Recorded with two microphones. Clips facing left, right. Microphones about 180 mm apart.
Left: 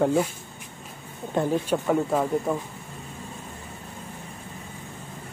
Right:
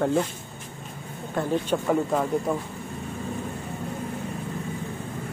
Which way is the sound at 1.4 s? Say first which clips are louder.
Left 3 dB; 20° left (ahead or behind).